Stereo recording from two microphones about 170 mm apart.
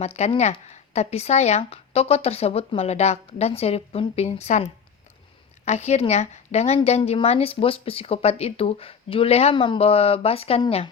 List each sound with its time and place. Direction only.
0.0 s a woman's voice: 40° left (ahead or behind)